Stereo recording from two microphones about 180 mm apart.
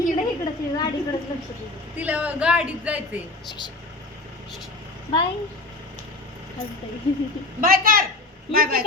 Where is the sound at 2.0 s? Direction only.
10° right (ahead or behind).